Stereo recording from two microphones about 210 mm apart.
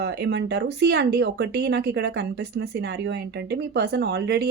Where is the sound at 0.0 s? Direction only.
50° right (ahead or behind).